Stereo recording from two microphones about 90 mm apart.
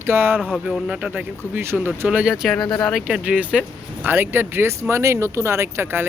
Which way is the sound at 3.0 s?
15° right (ahead or behind).